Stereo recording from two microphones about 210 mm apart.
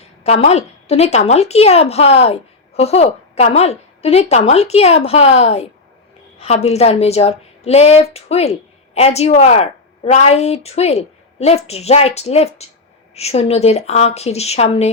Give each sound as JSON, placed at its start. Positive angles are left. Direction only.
{"t": 0.0, "sound": "a woman's voice", "side_deg": 30}